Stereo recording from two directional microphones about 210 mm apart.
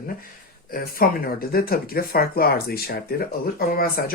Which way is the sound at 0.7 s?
45° left (ahead or behind).